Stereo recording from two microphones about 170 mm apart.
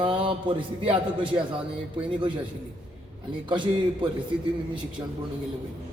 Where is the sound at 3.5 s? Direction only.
30° right (ahead or behind).